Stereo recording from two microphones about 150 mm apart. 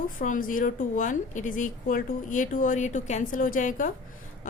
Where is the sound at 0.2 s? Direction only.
65° left (ahead or behind).